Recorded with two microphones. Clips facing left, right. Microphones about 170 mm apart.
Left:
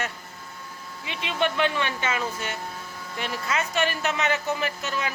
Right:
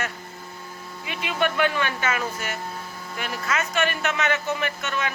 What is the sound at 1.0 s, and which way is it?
Speech, 25° left (ahead or behind).